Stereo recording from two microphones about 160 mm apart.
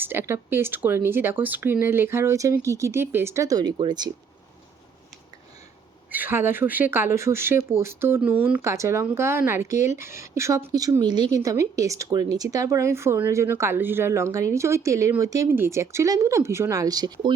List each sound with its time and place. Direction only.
0.0 s speech: 15° right (ahead or behind)
6.1 s speech: 10° right (ahead or behind)